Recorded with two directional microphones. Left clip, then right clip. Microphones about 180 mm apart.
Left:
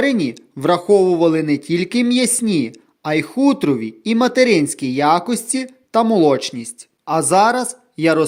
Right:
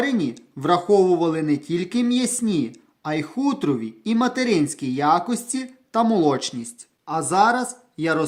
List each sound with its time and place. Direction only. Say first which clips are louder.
0.0 s speech: left 6 dB; 30° left (ahead or behind)
7.0 s speech: left 5 dB; 40° left (ahead or behind)